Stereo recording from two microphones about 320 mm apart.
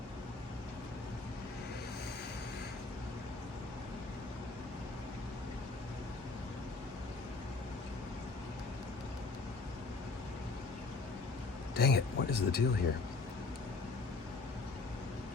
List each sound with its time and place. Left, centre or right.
11.7 s speech: left